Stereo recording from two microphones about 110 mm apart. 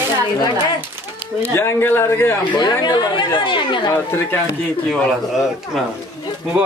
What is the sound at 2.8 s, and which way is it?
Speech, 45° left (ahead or behind).